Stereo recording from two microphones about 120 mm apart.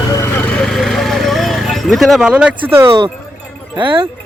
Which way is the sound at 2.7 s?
25° right (ahead or behind).